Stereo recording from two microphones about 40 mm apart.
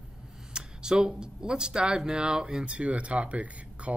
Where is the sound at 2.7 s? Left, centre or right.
Right.